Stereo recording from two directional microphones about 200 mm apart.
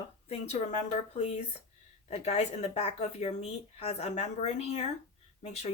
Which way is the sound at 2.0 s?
30° left (ahead or behind).